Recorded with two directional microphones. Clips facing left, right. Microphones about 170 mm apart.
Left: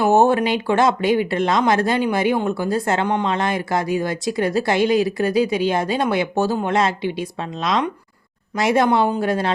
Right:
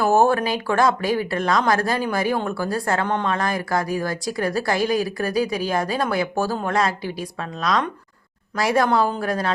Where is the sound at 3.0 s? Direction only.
15° left (ahead or behind).